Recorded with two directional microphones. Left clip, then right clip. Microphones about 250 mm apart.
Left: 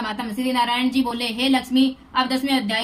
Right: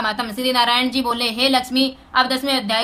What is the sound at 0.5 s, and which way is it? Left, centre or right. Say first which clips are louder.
A woman's voice: right 3 dB; centre.